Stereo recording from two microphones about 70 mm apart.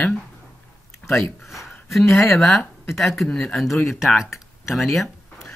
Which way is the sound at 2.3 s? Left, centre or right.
Centre.